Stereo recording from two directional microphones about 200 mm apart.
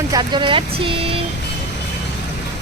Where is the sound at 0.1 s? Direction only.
20° right (ahead or behind).